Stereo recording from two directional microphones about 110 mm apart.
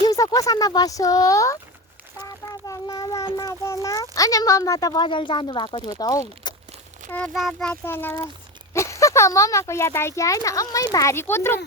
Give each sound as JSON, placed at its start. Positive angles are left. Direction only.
{"t": 0.0, "sound": "speech", "side_deg": 35}
{"t": 2.1, "sound": "a sound", "side_deg": 30}
{"t": 3.3, "sound": "speech", "side_deg": 30}
{"t": 5.0, "sound": "speech", "side_deg": 45}
{"t": 7.3, "sound": "speech", "side_deg": 0}
{"t": 7.7, "sound": "speech", "side_deg": 20}